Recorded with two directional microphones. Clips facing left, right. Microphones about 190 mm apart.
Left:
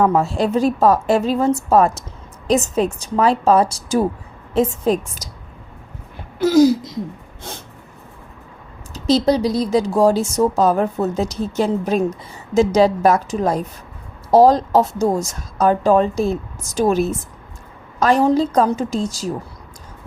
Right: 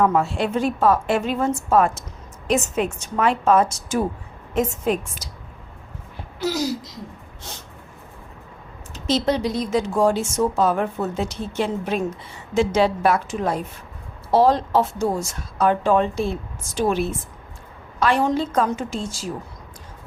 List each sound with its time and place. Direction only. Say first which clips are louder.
0.0 s a woman's voice: left 3 dB; 35° left (ahead or behind)
6.4 s a sound: left 11 dB; 50° left (ahead or behind)
8.9 s a woman's voice: left 5 dB; 35° left (ahead or behind)